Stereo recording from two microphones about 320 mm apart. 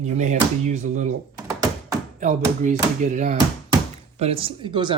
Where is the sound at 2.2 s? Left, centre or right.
Right.